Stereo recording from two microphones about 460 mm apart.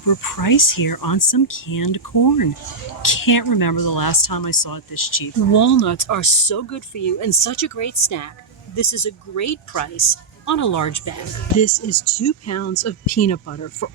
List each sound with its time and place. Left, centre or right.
0.0 s speech: left